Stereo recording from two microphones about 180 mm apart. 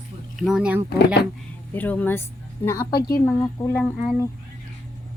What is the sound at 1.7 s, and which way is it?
Speech, 10° left (ahead or behind).